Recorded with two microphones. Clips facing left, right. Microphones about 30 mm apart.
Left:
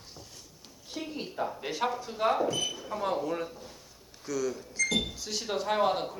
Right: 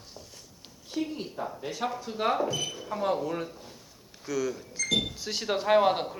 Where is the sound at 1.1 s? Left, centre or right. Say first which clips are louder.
Left 1 dB; centre.